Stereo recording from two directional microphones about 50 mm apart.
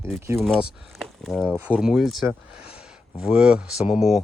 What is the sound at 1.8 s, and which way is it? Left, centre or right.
Speech, centre.